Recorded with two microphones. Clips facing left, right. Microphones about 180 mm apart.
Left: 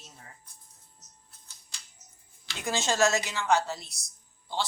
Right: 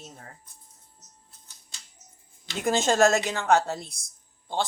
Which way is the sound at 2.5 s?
50° right (ahead or behind).